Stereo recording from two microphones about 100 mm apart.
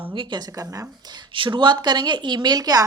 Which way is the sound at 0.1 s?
50° right (ahead or behind).